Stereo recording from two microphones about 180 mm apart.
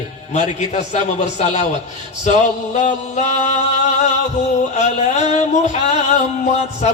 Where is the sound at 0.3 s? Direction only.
40° left (ahead or behind).